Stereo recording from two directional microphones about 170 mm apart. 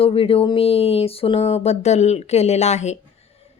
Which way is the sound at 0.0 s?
35° left (ahead or behind).